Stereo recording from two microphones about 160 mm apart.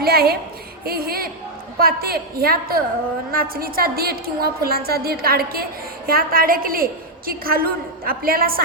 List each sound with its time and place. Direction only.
0.0 s a woman's voice: 75° right (ahead or behind)